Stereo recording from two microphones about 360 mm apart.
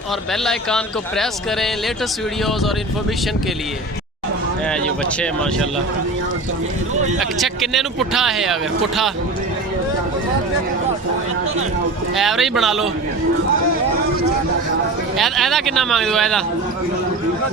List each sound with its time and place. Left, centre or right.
0.4 s a man's voice: centre
5.2 s a man's voice: centre
7.2 s a man's voice: centre
12.1 s a man's voice: centre
15.2 s a man's voice: centre